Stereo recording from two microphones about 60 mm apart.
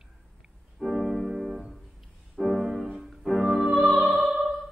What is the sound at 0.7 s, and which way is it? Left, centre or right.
Music, centre.